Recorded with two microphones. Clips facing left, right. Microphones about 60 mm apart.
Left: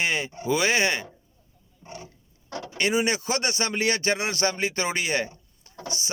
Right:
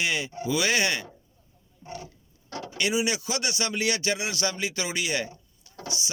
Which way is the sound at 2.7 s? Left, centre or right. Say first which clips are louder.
Left 3 dB; left.